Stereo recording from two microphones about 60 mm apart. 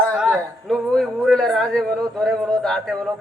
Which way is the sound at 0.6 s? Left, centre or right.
Centre.